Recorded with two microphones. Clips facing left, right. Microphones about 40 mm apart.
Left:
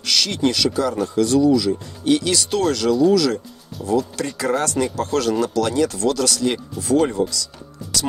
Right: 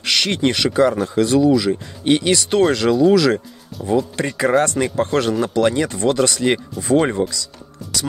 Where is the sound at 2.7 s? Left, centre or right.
Right.